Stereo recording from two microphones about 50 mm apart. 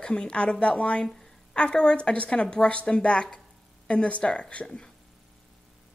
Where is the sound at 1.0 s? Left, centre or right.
Centre.